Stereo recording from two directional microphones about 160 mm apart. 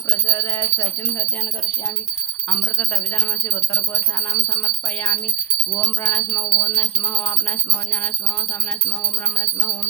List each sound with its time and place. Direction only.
0.3 s bell: 20° left (ahead or behind)
2.5 s speech: 10° left (ahead or behind)